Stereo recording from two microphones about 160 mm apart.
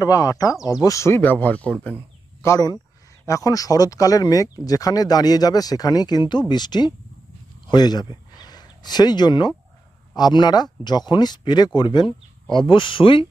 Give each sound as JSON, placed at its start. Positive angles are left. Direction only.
{"t": 0.0, "sound": "speech", "side_deg": 25}
{"t": 2.4, "sound": "speech", "side_deg": 20}